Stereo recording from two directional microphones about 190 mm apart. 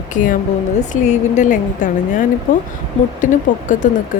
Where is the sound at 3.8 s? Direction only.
40° left (ahead or behind).